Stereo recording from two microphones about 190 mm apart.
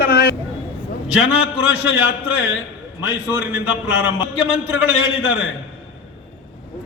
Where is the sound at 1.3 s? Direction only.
85° left.